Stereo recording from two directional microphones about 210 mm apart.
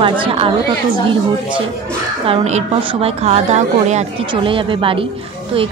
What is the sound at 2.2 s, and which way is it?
A woman's voice, 30° right (ahead or behind).